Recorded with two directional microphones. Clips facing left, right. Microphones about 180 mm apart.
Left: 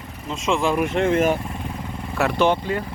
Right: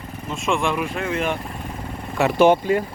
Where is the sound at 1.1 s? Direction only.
45° left (ahead or behind).